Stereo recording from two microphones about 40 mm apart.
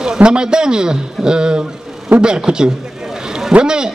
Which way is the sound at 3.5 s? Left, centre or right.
Right.